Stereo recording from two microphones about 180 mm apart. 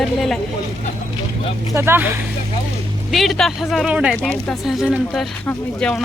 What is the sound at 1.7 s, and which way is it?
Speech, 15° right (ahead or behind).